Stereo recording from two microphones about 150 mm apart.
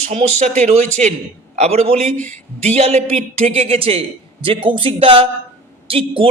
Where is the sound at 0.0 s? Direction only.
50° right (ahead or behind).